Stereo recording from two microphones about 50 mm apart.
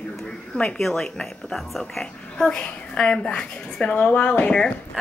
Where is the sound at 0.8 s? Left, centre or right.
Centre; by 4.5 s left.